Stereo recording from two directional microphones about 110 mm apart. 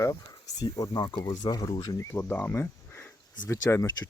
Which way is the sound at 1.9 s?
20° left (ahead or behind).